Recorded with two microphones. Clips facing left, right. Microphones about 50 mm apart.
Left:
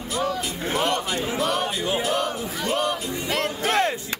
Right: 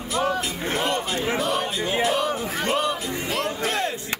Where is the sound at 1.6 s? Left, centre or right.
Right.